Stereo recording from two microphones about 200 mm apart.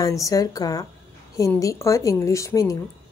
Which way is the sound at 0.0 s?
15° left (ahead or behind).